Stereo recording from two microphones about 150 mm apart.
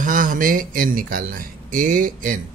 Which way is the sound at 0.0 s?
60° right (ahead or behind).